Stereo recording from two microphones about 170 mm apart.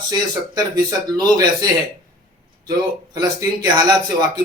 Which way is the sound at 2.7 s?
20° right (ahead or behind).